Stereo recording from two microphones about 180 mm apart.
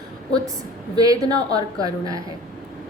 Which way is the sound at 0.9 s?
20° right (ahead or behind).